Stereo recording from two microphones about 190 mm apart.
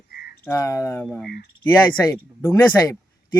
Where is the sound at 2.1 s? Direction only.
15° left (ahead or behind).